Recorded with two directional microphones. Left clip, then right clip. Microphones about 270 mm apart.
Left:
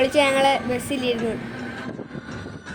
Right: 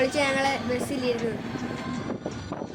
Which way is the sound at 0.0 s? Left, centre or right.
Centre.